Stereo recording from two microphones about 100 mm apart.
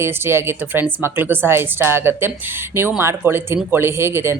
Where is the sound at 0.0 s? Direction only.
25° right (ahead or behind).